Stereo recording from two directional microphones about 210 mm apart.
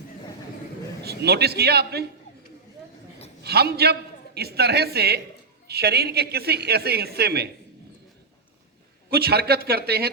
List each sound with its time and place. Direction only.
1.0 s a woman's voice: 50° right (ahead or behind)
3.4 s a woman's voice: 50° right (ahead or behind)
9.0 s a woman's voice: 50° right (ahead or behind)